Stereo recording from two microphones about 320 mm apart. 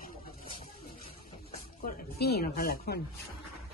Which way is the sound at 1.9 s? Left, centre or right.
Left.